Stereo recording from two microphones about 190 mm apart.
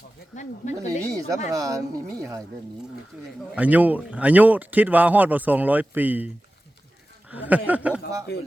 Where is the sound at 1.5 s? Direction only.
20° right (ahead or behind).